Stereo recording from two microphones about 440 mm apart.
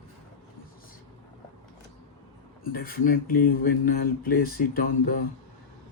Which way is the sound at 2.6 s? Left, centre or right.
Centre.